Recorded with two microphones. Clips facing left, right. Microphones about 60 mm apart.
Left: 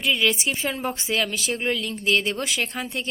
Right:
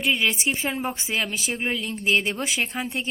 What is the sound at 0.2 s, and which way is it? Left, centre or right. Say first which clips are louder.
Speech: left 1 dB; right.